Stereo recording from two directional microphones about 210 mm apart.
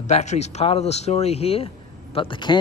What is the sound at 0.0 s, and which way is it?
Speech, 35° left (ahead or behind).